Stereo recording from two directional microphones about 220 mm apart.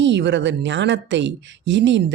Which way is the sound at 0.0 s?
55° right (ahead or behind).